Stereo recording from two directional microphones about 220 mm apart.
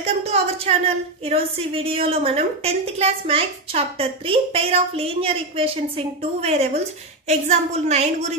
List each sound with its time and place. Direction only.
0.0 s a woman's voice: 30° right (ahead or behind)